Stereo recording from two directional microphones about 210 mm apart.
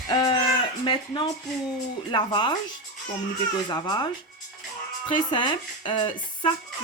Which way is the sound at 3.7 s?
20° left (ahead or behind).